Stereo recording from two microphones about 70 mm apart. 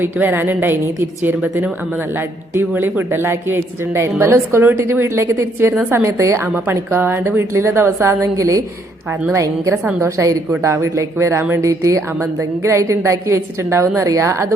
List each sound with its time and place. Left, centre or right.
0.0 s a woman's voice: right
6.5 s a woman's voice: right